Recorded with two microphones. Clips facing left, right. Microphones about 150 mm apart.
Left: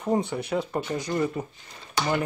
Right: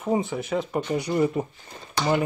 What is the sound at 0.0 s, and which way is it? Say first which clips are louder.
Speech: right 1 dB; centre (ahead or behind).